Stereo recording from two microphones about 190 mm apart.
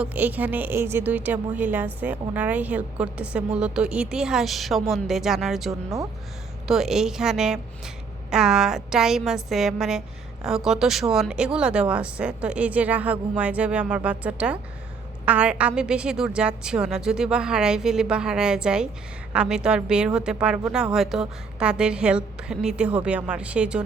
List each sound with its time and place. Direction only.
0.0 s a woman's voice: 10° right (ahead or behind)